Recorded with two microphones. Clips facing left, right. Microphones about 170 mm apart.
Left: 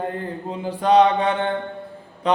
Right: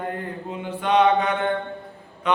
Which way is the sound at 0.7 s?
35° left (ahead or behind).